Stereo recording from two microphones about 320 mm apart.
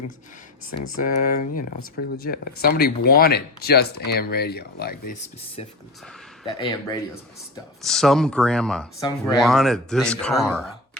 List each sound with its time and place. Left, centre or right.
0.9 s speech: left
5.6 s speech: centre
7.8 s speech: centre
9.4 s speech: centre